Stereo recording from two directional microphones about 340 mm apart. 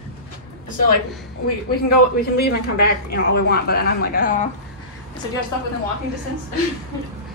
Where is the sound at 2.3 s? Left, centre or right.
Left.